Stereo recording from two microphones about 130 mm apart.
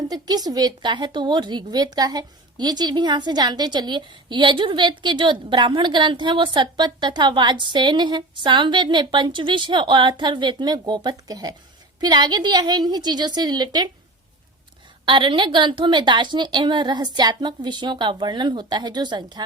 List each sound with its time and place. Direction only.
0.1 s a woman's voice: 30° right (ahead or behind)
15.0 s a woman's voice: 40° right (ahead or behind)